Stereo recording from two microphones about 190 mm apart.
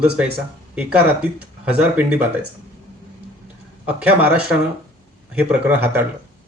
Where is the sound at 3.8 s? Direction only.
5° right (ahead or behind).